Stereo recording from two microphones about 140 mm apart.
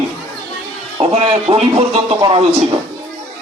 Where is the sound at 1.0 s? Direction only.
45° right (ahead or behind).